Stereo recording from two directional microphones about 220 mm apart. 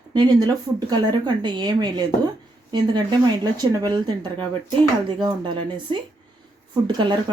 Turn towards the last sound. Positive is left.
turn(degrees=-20)  # may be behind; listen again after turning